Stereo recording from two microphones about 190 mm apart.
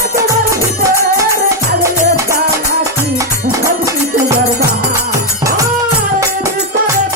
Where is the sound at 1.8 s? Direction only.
15° right (ahead or behind).